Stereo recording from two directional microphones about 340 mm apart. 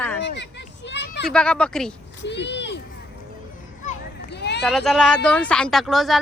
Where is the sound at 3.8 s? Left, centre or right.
Left.